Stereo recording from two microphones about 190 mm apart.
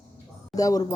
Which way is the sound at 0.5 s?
20° left (ahead or behind).